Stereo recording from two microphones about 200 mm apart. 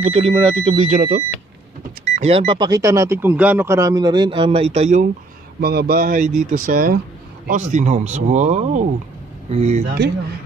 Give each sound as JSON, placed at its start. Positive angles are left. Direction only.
{"t": 0.0, "sound": "speech", "side_deg": -30}
{"t": 2.1, "sound": "speech", "side_deg": -30}
{"t": 5.6, "sound": "speech", "side_deg": -50}